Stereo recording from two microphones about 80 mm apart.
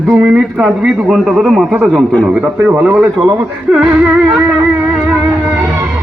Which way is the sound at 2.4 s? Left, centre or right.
Centre.